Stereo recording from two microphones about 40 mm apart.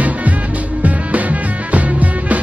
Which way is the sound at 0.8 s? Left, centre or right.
Right.